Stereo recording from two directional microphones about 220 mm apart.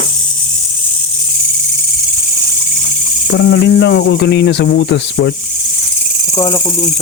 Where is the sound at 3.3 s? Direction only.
55° left (ahead or behind).